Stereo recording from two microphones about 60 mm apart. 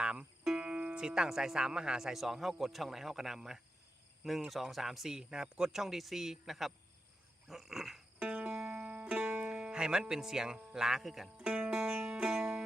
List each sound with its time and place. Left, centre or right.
0.0 s speech: centre
7.4 s dog: centre
8.2 s music: right
8.4 s music: centre
10.8 s speech: centre
11.3 s music: centre